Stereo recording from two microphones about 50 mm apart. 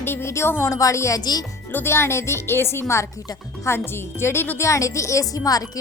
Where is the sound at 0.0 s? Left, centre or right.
Left.